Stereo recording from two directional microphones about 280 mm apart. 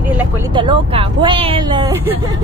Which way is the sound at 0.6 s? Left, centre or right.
Centre.